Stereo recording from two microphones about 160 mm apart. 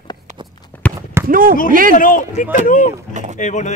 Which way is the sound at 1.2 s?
60° right (ahead or behind).